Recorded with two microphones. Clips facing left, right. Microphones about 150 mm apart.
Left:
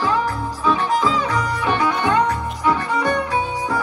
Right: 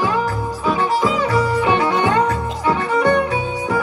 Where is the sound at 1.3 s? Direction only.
30° right (ahead or behind).